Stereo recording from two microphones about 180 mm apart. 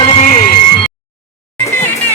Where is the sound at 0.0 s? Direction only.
40° left (ahead or behind).